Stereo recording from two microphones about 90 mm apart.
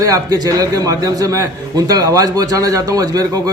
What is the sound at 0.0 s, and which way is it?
A man's voice, 45° right (ahead or behind).